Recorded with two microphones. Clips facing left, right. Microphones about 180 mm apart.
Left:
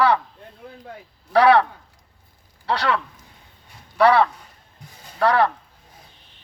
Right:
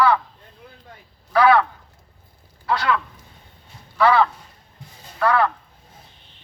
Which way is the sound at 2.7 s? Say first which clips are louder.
Right 1 dB; 35° left (ahead or behind).